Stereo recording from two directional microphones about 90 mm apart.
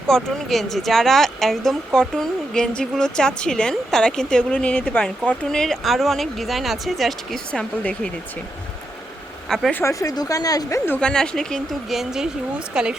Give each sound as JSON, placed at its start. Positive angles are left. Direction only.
{"t": 0.1, "sound": "speech", "side_deg": 0}
{"t": 9.5, "sound": "speech", "side_deg": 5}
{"t": 9.8, "sound": "a woman's voice", "side_deg": 35}
{"t": 11.0, "sound": "speech", "side_deg": 10}